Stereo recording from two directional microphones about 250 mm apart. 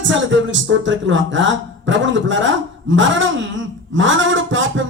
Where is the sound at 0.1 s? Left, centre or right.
Right.